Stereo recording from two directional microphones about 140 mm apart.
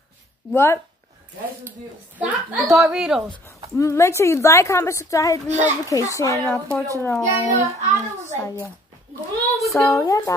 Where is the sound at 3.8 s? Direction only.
20° left (ahead or behind).